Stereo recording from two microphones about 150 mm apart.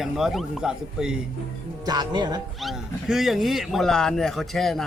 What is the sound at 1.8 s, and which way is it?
Speech, 30° right (ahead or behind).